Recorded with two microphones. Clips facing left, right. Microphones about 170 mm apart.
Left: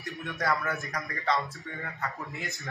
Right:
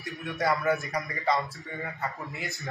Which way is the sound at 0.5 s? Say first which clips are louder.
Right 5 dB; 20° right (ahead or behind).